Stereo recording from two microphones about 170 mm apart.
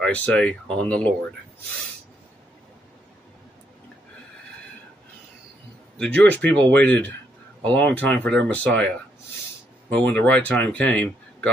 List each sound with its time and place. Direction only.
0.0 s speech: 10° left (ahead or behind)
5.9 s speech: 10° left (ahead or behind)